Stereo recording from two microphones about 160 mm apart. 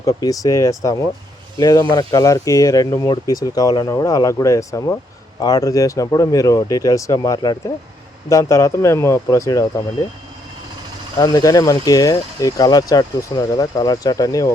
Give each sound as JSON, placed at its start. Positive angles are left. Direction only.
{"t": 0.0, "sound": "speech", "side_deg": 20}
{"t": 11.2, "sound": "speech", "side_deg": 25}